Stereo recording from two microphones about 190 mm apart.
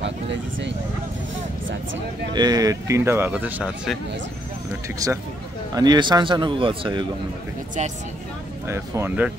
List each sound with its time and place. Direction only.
0.0 s a sound: 70° right (ahead or behind)
2.3 s speech: 20° right (ahead or behind); by 4.0 s 5° right (ahead or behind)
4.8 s speech: 15° right (ahead or behind)
8.6 s speech: 15° right (ahead or behind)